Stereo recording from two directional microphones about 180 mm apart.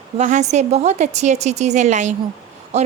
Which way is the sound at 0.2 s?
40° right (ahead or behind).